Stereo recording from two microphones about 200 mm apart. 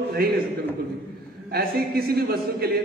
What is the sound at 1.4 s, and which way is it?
A man's voice, 50° right (ahead or behind).